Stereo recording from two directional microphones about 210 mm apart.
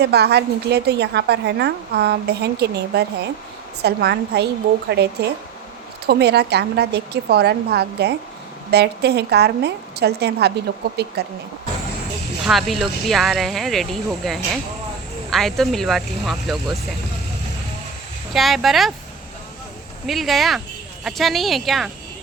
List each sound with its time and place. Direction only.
0.0 s a woman's voice: 50° right (ahead or behind)
12.5 s speech: centre (ahead or behind)
18.3 s speech: centre (ahead or behind)
20.1 s speech: centre (ahead or behind)